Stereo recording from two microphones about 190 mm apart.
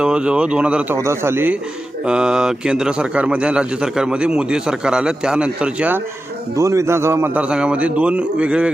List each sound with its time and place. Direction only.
0.0 s a man's voice: 5° right (ahead or behind)